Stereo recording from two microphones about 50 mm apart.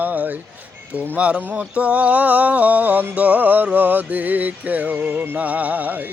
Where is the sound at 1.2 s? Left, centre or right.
Right.